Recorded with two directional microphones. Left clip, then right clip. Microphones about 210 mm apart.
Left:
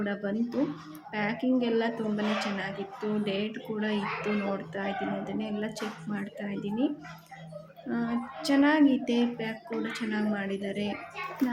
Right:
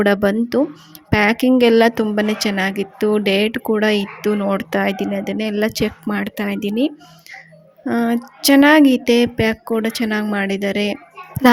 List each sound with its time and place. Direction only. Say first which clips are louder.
0.0 s speech: right 16 dB; 55° right (ahead or behind)